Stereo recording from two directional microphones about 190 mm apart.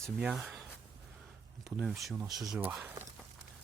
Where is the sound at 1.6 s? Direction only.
5° right (ahead or behind).